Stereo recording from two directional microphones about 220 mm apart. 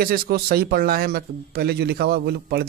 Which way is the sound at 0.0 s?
45° right (ahead or behind).